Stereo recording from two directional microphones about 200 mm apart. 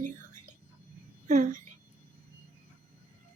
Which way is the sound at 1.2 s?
40° right (ahead or behind).